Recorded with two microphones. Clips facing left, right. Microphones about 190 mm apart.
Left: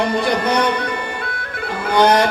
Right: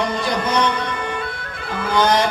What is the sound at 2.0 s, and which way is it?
Speech, 65° left (ahead or behind).